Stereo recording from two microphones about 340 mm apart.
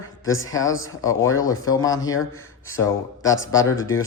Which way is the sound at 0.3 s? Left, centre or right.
Centre.